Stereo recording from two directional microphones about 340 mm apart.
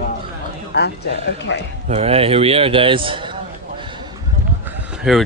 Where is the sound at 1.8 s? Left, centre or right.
Centre.